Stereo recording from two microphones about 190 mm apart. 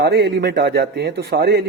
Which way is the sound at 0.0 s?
60° right (ahead or behind).